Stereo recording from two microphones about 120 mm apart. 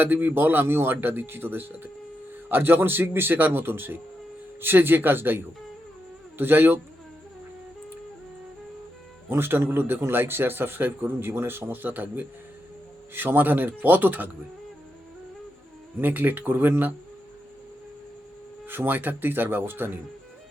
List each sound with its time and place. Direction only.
0.0 s a man's voice: 15° right (ahead or behind)
9.3 s a man's voice: 20° right (ahead or behind)
16.0 s a man's voice: 15° right (ahead or behind)
18.7 s a man's voice: 15° right (ahead or behind)